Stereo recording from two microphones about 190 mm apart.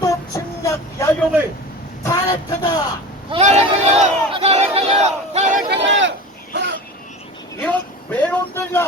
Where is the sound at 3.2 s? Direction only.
30° right (ahead or behind).